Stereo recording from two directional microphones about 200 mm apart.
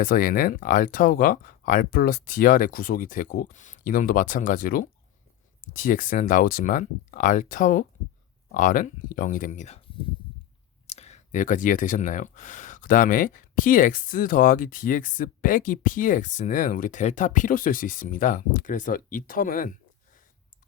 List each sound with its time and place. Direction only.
0.0 s speech: 45° left (ahead or behind)
10.8 s speech: 35° left (ahead or behind)